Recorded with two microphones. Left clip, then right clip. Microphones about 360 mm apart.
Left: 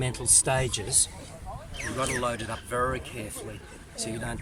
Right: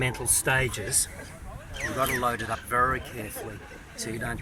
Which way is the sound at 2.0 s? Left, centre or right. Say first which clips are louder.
Right 3 dB; centre.